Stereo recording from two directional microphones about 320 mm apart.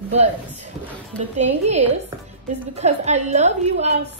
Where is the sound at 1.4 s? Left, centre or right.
Right.